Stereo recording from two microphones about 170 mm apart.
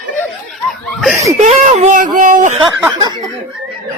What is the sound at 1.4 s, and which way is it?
Speech, 40° right (ahead or behind).